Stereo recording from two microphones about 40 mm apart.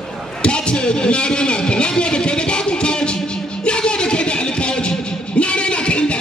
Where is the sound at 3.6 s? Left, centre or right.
Left.